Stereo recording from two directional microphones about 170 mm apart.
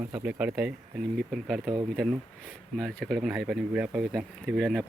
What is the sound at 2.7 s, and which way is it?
Speech, centre (ahead or behind).